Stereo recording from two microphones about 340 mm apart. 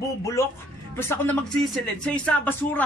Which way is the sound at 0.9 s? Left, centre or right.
Centre.